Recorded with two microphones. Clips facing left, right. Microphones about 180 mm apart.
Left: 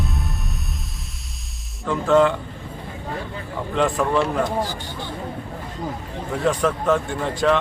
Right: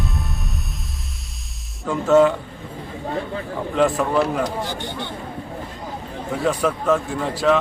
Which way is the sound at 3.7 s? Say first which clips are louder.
Right 1 dB; 5° right (ahead or behind).